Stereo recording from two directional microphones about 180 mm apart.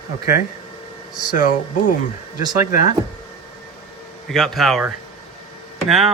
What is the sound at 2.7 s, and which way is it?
Speech, 50° left (ahead or behind).